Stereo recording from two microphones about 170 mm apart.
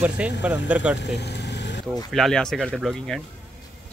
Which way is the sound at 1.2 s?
85° left.